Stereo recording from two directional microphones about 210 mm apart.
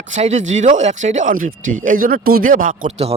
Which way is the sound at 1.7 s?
40° right (ahead or behind).